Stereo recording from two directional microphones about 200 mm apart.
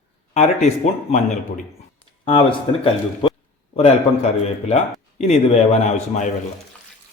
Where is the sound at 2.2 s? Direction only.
25° left (ahead or behind).